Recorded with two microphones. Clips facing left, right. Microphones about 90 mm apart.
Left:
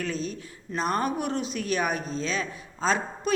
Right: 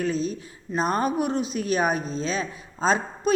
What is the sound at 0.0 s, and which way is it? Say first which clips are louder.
Speech: right 5 dB; 20° right (ahead or behind).